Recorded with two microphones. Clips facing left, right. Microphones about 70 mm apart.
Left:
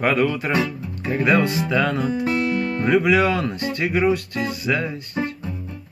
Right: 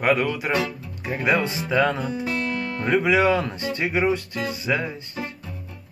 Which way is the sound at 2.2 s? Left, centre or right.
Left.